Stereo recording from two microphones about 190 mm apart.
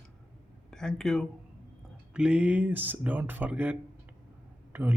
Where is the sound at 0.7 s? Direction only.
5° left (ahead or behind).